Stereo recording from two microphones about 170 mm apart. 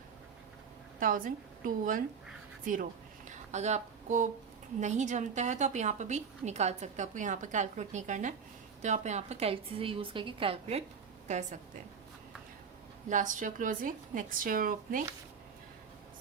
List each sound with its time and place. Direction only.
0.9 s a woman's voice: 50° right (ahead or behind)
13.1 s a woman's voice: 50° right (ahead or behind)